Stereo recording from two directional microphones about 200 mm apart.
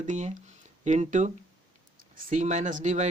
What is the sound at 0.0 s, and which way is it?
Speech, 40° right (ahead or behind).